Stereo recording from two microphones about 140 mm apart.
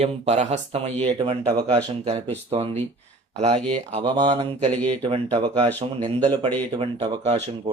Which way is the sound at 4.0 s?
35° right (ahead or behind).